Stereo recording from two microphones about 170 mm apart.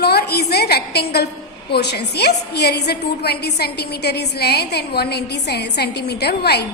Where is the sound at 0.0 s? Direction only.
70° left (ahead or behind).